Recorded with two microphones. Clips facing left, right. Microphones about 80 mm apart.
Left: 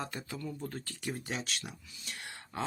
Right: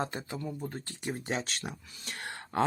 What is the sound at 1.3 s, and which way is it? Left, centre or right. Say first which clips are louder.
Speech: right 4 dB; right.